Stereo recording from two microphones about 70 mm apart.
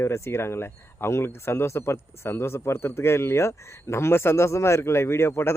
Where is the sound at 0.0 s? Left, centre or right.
Left.